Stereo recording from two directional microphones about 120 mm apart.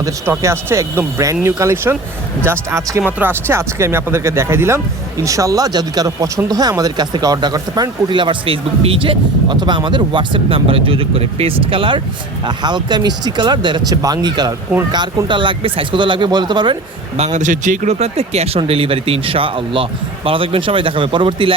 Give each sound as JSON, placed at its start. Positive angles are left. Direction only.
{"t": 0.0, "sound": "speech", "side_deg": -20}
{"t": 17.2, "sound": "speech", "side_deg": -70}